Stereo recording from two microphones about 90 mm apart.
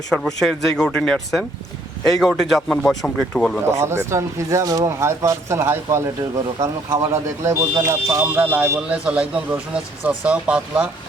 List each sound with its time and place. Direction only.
0.1 s speech: 5° left (ahead or behind)
3.7 s speech: 30° right (ahead or behind)
8.4 s speech: 20° right (ahead or behind)